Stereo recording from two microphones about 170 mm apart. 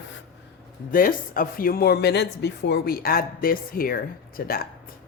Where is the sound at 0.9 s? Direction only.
55° left (ahead or behind).